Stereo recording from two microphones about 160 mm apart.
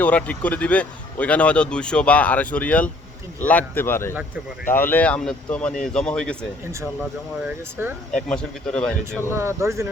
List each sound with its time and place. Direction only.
0.0 s speech: 10° left (ahead or behind)
7.4 s speech: 15° right (ahead or behind)
8.1 s speech: 5° left (ahead or behind)
9.3 s speech: 15° right (ahead or behind)